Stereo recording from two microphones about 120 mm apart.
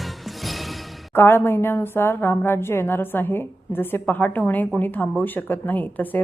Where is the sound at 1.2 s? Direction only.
20° left (ahead or behind).